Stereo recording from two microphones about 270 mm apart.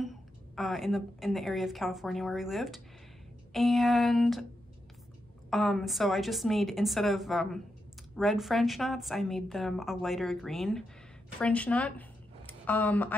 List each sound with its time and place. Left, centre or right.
0.6 s a woman's voice: centre
5.5 s a woman's voice: centre